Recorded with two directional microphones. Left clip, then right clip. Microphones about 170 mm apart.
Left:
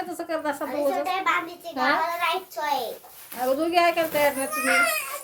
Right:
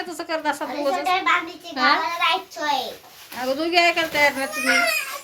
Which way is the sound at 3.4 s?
25° left (ahead or behind).